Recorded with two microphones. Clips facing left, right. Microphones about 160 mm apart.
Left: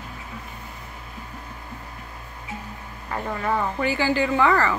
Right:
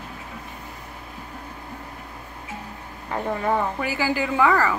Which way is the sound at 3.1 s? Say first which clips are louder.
Right 2 dB; 15° right (ahead or behind).